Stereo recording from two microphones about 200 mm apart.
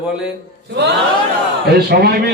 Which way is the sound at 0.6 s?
55° right (ahead or behind).